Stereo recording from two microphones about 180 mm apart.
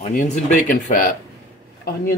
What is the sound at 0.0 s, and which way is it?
Speech, 45° left (ahead or behind).